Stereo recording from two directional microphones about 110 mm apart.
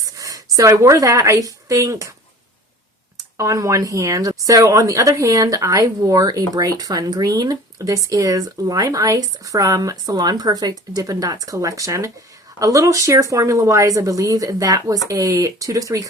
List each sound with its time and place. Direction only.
0.0 s a sound: 30° right (ahead or behind)
0.5 s a woman's voice: 30° right (ahead or behind)
3.3 s a woman's voice: 30° right (ahead or behind)